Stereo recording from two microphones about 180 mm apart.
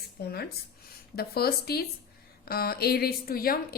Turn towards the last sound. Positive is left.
turn(degrees=55)  # may be behind; listen again after turning